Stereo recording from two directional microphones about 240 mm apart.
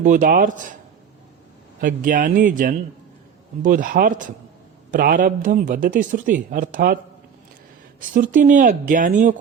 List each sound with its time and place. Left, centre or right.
0.0 s speech: right
1.9 s speech: right
8.1 s speech: right